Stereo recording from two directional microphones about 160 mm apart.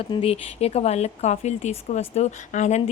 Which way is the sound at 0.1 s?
40° left (ahead or behind).